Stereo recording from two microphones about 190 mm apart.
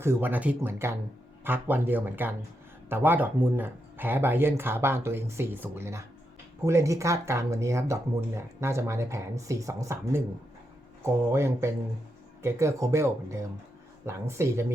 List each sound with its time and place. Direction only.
0.0 s speech: 10° right (ahead or behind)